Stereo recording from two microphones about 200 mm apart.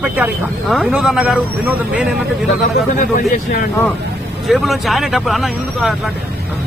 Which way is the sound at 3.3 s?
45° left (ahead or behind).